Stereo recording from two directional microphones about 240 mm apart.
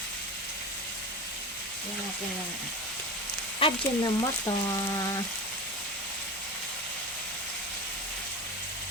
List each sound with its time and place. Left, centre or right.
3.6 s frying: centre